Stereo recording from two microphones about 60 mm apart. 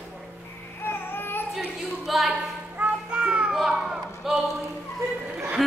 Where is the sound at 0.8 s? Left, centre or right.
Left.